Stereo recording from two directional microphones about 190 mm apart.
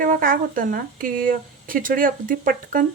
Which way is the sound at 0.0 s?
45° right (ahead or behind).